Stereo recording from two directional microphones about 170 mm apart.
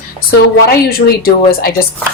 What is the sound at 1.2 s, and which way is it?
Speech, 60° left (ahead or behind).